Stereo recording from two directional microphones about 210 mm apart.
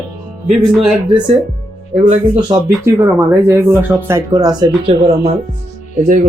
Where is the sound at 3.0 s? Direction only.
10° right (ahead or behind).